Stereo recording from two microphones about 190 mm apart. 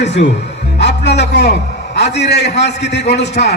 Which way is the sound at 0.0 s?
65° left (ahead or behind).